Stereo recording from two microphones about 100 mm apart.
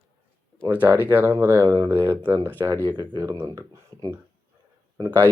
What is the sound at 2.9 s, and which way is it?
Speech, 50° right (ahead or behind).